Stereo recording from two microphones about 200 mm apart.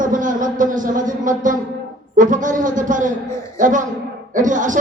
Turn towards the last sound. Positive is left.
turn(degrees=-40)  # may be behind; listen again after turning